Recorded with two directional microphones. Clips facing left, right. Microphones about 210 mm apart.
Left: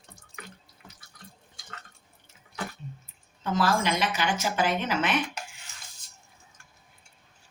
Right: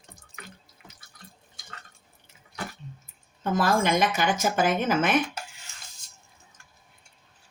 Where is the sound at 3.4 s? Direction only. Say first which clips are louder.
Right 2 dB; 50° right (ahead or behind).